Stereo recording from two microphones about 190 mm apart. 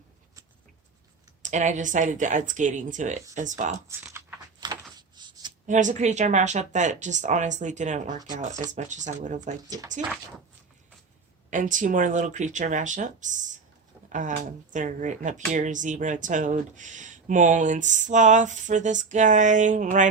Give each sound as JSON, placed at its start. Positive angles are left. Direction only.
{"t": 1.4, "sound": "speech", "side_deg": -40}
{"t": 4.6, "sound": "a sound", "side_deg": -20}
{"t": 5.6, "sound": "speech", "side_deg": -40}
{"t": 9.6, "sound": "speech", "side_deg": -20}
{"t": 11.5, "sound": "speech", "side_deg": -40}